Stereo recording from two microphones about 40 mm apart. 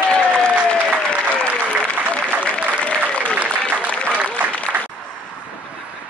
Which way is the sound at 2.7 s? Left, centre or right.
Left.